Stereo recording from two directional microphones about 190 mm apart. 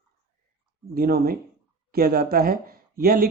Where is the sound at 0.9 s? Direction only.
50° right (ahead or behind).